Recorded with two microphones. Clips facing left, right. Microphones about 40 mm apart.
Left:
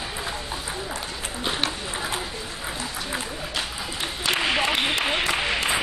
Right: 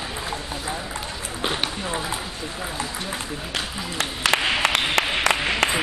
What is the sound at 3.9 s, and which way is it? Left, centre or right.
Applause, right.